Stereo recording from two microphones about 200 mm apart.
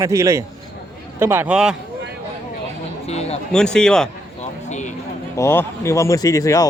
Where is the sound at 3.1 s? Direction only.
30° left (ahead or behind).